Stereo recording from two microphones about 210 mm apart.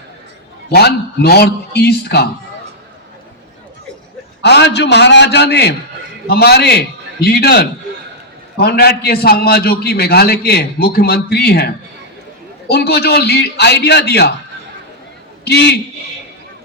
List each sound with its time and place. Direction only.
0.7 s a man's voice: 50° left (ahead or behind)
4.4 s a man's voice: 55° left (ahead or behind)
15.4 s a man's voice: 50° left (ahead or behind)